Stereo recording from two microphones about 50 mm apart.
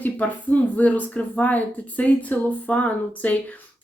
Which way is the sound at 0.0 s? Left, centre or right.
Left.